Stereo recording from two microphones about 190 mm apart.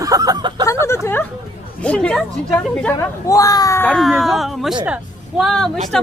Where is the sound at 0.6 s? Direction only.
15° left (ahead or behind).